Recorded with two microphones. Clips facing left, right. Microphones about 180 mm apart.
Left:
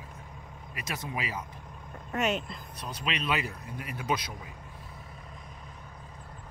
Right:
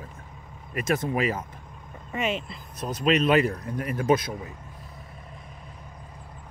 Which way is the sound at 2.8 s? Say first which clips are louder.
Right 12 dB; 45° right (ahead or behind).